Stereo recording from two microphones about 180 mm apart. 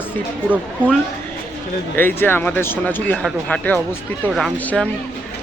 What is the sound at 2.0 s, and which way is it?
Speech, 10° left (ahead or behind).